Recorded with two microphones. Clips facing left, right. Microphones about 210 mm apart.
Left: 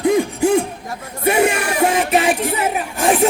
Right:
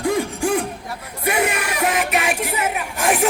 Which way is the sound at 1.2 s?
30° left (ahead or behind).